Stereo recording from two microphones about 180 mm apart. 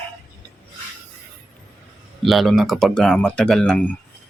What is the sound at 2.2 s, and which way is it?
Speech, centre (ahead or behind).